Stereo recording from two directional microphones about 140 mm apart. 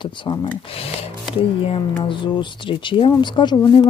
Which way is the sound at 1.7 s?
35° left (ahead or behind).